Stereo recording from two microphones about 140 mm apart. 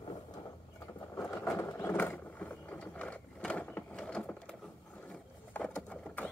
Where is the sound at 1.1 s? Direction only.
15° left (ahead or behind).